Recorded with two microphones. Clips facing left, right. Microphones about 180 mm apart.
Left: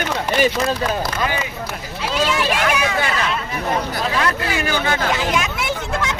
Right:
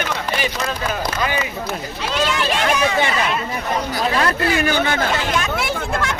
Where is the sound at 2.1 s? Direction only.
5° left (ahead or behind).